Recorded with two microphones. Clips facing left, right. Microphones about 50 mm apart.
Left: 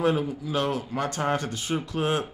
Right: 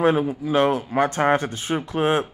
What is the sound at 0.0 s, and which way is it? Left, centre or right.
Speech, right.